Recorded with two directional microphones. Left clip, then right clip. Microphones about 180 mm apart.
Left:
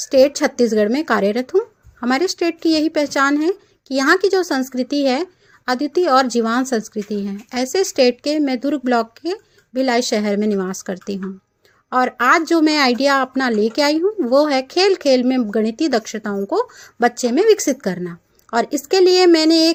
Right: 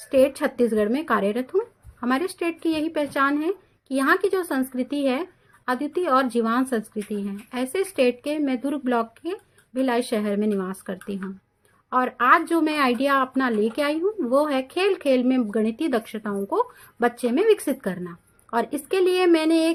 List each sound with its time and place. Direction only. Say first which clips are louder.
0.0 s a woman's voice: left 6 dB; 40° left (ahead or behind)